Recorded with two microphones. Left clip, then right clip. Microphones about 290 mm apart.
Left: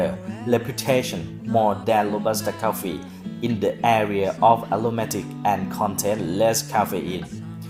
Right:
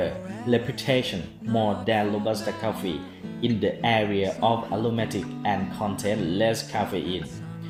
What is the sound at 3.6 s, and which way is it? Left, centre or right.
Speech, left.